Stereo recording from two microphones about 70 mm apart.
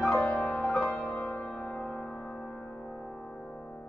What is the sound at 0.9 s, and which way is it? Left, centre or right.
Music, centre.